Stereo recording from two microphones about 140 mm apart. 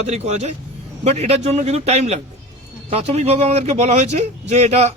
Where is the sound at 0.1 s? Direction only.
50° right (ahead or behind).